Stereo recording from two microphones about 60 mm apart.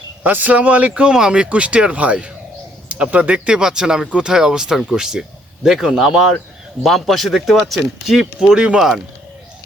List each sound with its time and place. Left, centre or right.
0.2 s speech: right; by 6.3 s centre
6.8 s speech: centre